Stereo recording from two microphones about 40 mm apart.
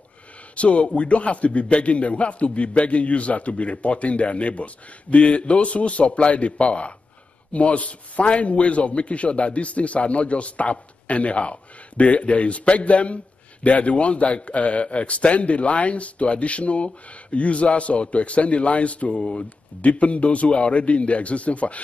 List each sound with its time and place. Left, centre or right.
0.6 s a man's voice: left